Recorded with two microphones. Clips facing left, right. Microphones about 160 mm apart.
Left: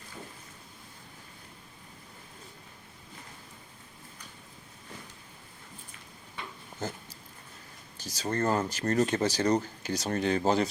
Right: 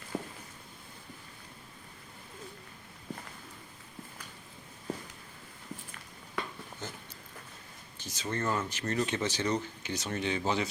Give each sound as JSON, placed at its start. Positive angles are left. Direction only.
{"t": 0.1, "sound": "a sound", "side_deg": -65}
{"t": 6.7, "sound": "dog", "side_deg": 40}
{"t": 7.9, "sound": "speech", "side_deg": 40}